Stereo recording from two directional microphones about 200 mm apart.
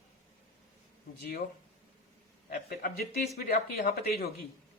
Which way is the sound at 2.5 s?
50° left (ahead or behind).